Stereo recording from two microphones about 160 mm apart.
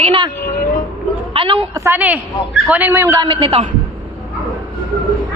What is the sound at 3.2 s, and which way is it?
Speech, 35° right (ahead or behind).